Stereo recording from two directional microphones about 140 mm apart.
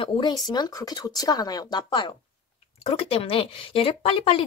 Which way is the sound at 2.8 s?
45° left (ahead or behind).